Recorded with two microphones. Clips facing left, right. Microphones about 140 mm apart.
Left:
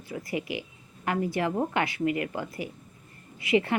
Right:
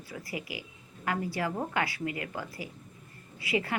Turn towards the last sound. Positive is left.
turn(degrees=25)  # may be behind; listen again after turning